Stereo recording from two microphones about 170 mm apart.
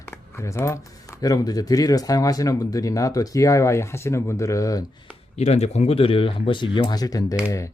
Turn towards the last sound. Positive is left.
turn(degrees=20)  # may be behind; listen again after turning